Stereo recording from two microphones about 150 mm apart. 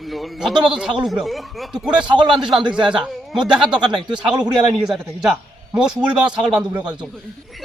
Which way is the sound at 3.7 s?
30° right (ahead or behind).